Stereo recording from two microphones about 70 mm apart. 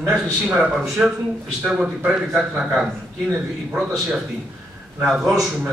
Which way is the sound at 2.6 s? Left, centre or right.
Centre.